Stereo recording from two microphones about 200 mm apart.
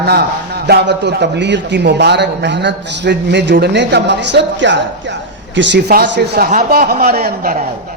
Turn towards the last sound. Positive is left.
turn(degrees=-50)  # may be behind; listen again after turning